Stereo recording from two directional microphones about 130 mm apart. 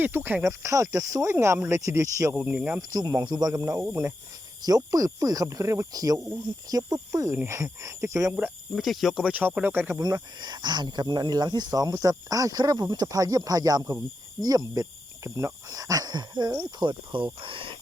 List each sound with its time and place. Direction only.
0.0 s speech: 15° right (ahead or behind)
2.3 s speech: 10° right (ahead or behind)
2.9 s speech: 30° right (ahead or behind)
8.7 s speech: centre (ahead or behind); by 10.0 s 15° right (ahead or behind)
10.0 s speech: 30° right (ahead or behind)